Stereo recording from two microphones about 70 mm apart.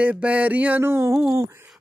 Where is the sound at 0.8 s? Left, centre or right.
Right.